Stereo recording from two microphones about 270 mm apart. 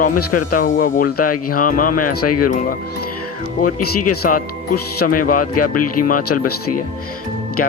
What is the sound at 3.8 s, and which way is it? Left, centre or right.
Speech, left.